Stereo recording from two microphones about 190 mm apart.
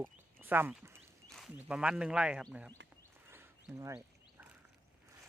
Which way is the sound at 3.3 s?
10° right (ahead or behind).